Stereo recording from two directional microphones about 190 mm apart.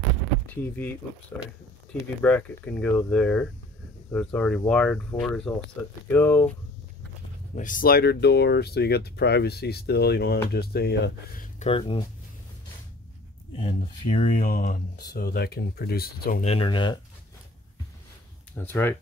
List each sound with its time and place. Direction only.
0.5 s speech: 10° left (ahead or behind)
2.2 s speech: 5° left (ahead or behind)
7.5 s speech: 45° left (ahead or behind)
11.6 s speech: 30° left (ahead or behind)
13.6 s speech: 30° left (ahead or behind)
14.3 s speech: 45° left (ahead or behind)
16.4 s speech: 25° left (ahead or behind)
18.5 s speech: 10° left (ahead or behind)